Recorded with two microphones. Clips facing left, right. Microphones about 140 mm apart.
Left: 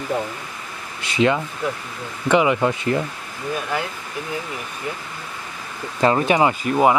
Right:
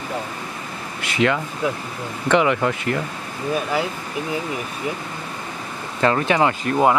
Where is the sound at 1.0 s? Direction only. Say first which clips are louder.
Left 1 dB; 25° left (ahead or behind).